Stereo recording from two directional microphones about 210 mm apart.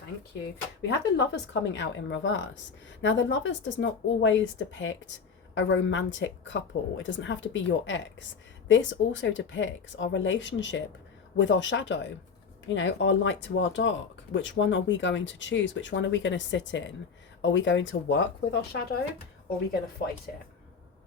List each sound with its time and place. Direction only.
0.8 s speech: 55° left (ahead or behind)